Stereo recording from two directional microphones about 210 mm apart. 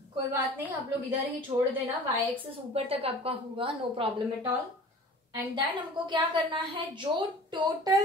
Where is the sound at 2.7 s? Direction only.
25° right (ahead or behind).